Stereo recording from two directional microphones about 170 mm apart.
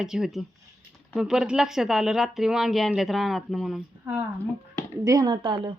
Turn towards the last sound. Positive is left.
turn(degrees=-30)  # may be behind; listen again after turning